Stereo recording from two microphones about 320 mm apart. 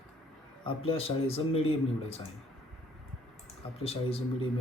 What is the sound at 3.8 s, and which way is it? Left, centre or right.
Speech, centre.